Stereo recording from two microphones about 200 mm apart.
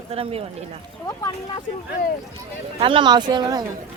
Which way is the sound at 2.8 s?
25° right (ahead or behind).